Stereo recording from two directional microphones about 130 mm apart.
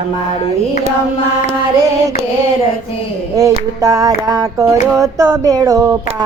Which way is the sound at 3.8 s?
25° right (ahead or behind).